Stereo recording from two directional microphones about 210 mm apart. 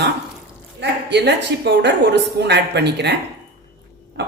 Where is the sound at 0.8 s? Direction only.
55° right (ahead or behind).